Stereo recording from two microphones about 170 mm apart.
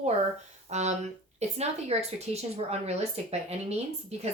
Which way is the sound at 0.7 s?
40° right (ahead or behind).